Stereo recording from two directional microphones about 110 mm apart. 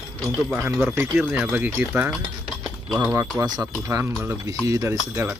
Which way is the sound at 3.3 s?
30° right (ahead or behind).